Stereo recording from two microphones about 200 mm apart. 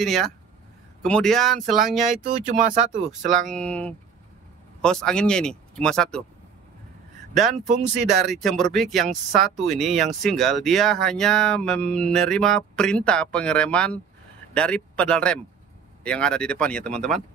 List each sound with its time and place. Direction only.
0.0 s speech: centre (ahead or behind)
2.0 s speech: 40° right (ahead or behind)
3.3 s speech: centre (ahead or behind)
7.5 s speech: 35° right (ahead or behind)
8.1 s speech: centre (ahead or behind)